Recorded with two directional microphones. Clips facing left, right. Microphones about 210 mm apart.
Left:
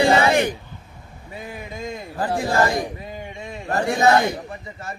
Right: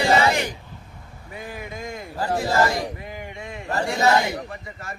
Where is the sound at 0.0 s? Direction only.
55° left (ahead or behind).